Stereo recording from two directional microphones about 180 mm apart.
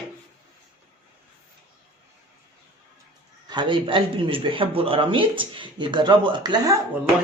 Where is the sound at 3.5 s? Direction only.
25° right (ahead or behind).